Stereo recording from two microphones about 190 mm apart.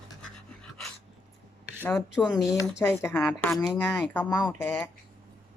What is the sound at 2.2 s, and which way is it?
Speech, 20° left (ahead or behind).